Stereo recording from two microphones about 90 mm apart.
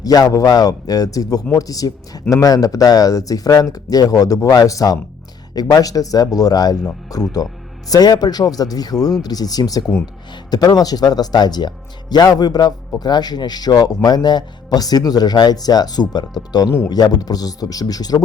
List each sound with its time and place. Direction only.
0.0 s speech: 45° left (ahead or behind)